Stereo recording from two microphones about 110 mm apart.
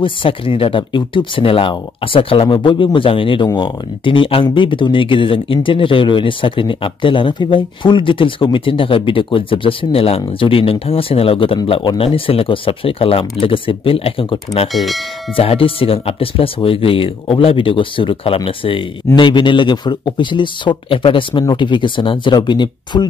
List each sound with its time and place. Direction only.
0.0 s speech: 50° left (ahead or behind)
14.7 s bell: centre (ahead or behind)
15.3 s speech: 55° left (ahead or behind)